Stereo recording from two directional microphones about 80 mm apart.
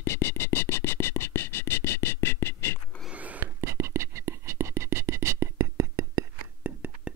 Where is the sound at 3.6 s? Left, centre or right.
Right.